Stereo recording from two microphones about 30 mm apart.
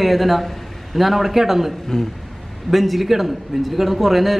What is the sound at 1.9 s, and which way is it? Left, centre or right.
Speech, centre.